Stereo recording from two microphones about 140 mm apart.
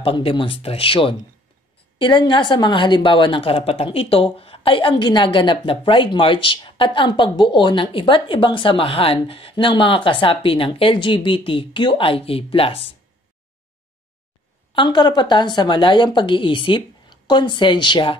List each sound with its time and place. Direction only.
0.0 s a woman's voice: 40° left (ahead or behind)
14.7 s a woman's voice: 35° left (ahead or behind)